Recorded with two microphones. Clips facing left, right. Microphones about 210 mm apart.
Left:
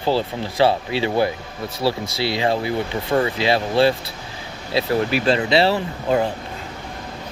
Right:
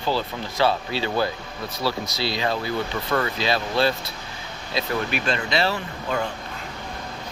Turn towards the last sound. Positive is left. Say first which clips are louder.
# left 7 dB
turn(degrees=30)  # may be behind; listen again after turning